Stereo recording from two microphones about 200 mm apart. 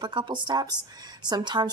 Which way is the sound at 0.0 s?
25° right (ahead or behind).